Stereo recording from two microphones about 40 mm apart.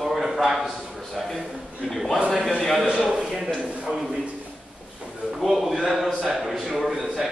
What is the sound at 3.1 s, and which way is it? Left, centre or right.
Speech, centre.